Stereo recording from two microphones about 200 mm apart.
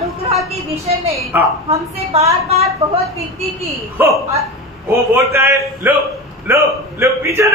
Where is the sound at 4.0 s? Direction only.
10° right (ahead or behind).